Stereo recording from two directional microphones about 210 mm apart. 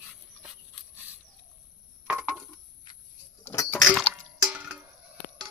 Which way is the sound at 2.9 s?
20° left (ahead or behind).